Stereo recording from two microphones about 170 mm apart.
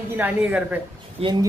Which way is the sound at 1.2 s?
35° right (ahead or behind).